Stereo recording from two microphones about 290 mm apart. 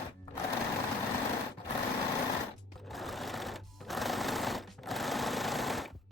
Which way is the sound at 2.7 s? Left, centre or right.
Centre.